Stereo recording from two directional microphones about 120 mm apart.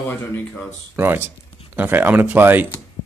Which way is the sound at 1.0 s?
20° right (ahead or behind).